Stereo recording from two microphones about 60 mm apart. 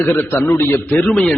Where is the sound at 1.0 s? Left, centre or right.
Centre.